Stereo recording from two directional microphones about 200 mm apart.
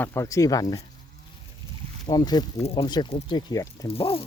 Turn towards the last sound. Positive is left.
turn(degrees=30)  # may be behind; listen again after turning